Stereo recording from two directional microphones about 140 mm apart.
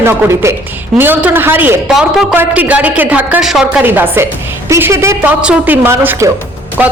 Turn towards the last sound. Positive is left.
turn(degrees=-10)  # may be behind; listen again after turning